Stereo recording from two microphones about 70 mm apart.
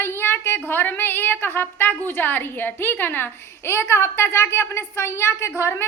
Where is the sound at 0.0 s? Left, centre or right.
Left.